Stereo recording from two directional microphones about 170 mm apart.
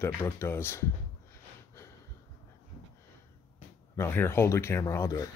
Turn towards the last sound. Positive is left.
turn(degrees=20)  # may be behind; listen again after turning